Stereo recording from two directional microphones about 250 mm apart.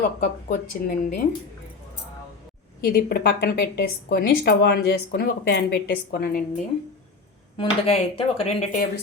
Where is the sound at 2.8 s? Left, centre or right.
Left.